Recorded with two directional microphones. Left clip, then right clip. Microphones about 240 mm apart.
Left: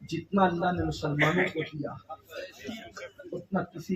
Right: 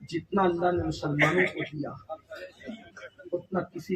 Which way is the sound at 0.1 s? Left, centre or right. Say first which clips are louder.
Even; right.